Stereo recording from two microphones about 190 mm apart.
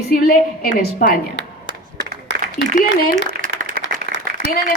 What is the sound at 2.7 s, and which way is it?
Speech, 50° left (ahead or behind).